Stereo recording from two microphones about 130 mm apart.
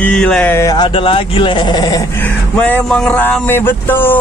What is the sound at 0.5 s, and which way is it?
Speech, 20° left (ahead or behind).